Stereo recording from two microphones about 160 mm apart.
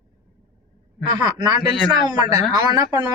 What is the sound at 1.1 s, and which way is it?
Speech, 25° right (ahead or behind).